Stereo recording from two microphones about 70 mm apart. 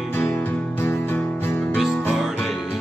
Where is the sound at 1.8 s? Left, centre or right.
Centre.